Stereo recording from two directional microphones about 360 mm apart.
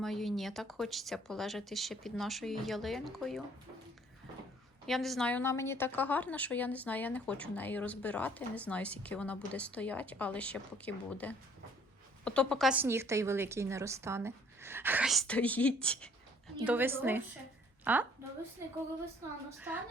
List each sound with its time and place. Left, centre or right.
0.0 s a woman's voice: centre
4.9 s a woman's voice: centre